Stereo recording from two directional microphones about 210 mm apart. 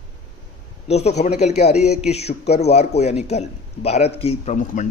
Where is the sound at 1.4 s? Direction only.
30° left (ahead or behind).